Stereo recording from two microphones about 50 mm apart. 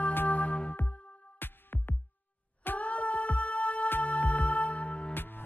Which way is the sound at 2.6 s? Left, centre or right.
Left.